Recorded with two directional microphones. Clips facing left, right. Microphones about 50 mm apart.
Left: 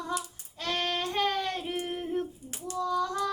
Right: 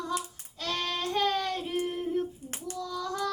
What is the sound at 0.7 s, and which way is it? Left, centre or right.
Child singing, left.